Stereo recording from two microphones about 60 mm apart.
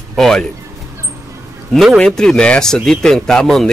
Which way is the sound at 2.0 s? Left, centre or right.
Centre.